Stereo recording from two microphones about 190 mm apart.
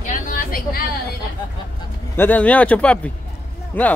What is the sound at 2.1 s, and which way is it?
Speech, 10° left (ahead or behind).